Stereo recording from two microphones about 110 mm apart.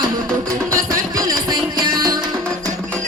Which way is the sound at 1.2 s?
40° right (ahead or behind).